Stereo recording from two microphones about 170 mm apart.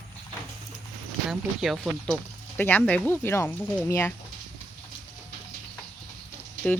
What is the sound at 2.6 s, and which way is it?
Speech, 10° left (ahead or behind).